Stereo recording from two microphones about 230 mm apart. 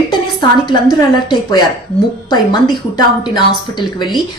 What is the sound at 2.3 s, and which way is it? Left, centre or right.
A woman's voice, centre.